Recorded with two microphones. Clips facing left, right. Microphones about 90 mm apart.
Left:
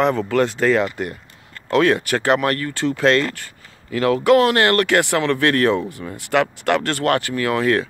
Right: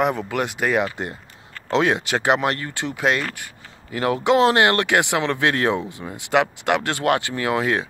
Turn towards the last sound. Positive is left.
turn(degrees=-15)  # may be behind; listen again after turning